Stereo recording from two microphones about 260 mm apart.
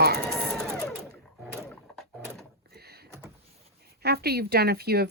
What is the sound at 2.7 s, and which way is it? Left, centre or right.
Vehicle, right.